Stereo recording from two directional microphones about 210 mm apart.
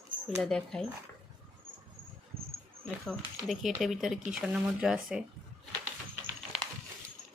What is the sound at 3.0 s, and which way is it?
Speech, centre (ahead or behind).